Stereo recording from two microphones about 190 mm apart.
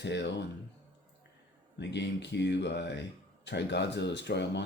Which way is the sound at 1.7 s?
65° left (ahead or behind).